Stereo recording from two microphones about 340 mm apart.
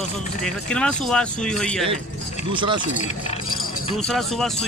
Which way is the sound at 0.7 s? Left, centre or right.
Centre.